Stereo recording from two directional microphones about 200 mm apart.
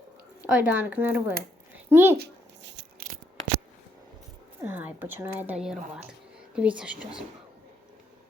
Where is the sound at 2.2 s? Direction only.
55° right (ahead or behind).